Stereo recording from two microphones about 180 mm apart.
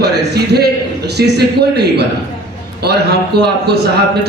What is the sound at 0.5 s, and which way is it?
A man's voice, 65° right (ahead or behind).